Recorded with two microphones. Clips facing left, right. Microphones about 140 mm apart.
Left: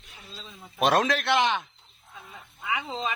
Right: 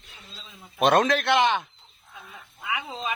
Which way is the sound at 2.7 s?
30° left (ahead or behind).